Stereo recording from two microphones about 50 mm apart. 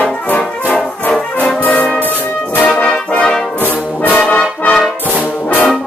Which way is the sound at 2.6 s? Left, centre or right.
Centre.